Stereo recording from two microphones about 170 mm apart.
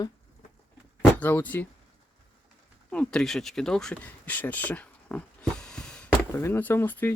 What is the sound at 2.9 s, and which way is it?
Speech, 5° left (ahead or behind).